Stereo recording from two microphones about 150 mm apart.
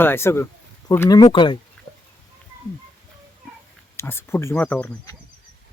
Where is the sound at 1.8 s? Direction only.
Centre (ahead or behind).